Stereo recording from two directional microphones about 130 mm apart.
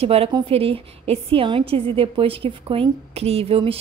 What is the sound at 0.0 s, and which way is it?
A woman's voice, 50° right (ahead or behind).